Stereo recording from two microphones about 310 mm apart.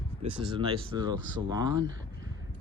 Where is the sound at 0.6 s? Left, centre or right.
Centre.